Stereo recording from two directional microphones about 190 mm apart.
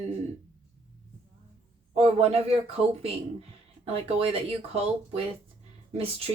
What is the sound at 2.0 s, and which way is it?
Speech, 35° right (ahead or behind).